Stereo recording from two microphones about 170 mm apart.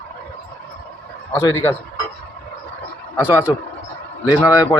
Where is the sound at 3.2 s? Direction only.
10° right (ahead or behind).